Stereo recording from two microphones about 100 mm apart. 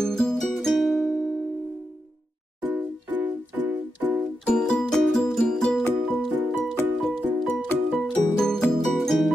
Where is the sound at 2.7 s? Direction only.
20° right (ahead or behind).